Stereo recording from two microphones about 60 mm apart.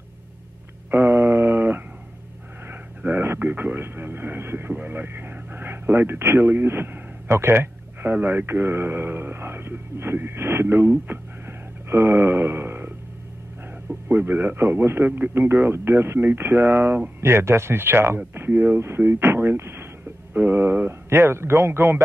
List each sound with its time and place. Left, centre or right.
0.9 s a sound: right
3.0 s a man's voice: right
11.9 s a sound: right
14.0 s a man's voice: right
15.0 s a man's voice: right
15.3 s a man's voice: right
17.2 s speech: right
18.5 s a man's voice: right
18.8 s a man's voice: right